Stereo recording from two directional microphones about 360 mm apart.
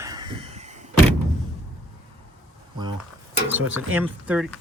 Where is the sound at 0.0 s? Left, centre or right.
Centre.